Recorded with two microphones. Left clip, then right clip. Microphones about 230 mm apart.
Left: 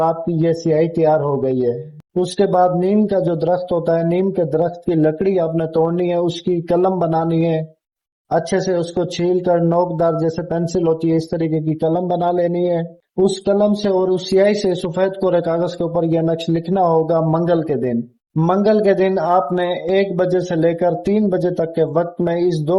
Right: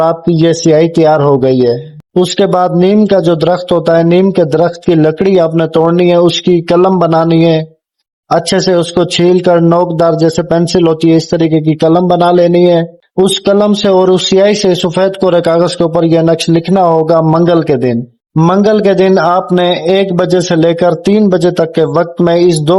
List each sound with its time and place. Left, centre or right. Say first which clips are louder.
0.4 s speech: right 8 dB; right
2.4 s speech: right 4 dB; right